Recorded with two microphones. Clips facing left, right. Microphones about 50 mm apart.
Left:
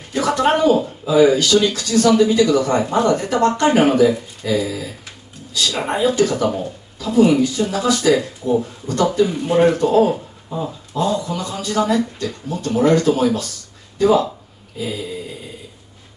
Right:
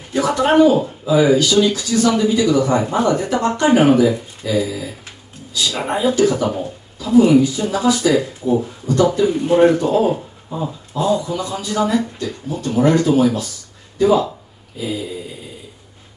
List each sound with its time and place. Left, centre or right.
0.1 s speech: centre
7.8 s speech: centre
8.4 s speech: centre